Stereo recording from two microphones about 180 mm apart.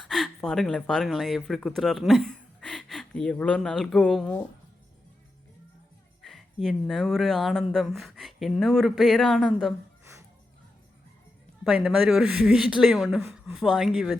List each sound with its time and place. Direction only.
0.1 s speech: centre (ahead or behind)
6.2 s speech: centre (ahead or behind)
10.0 s music: 15° right (ahead or behind)
11.6 s speech: 5° right (ahead or behind)